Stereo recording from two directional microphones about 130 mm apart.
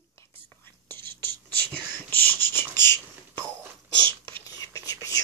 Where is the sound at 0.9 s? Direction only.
15° left (ahead or behind).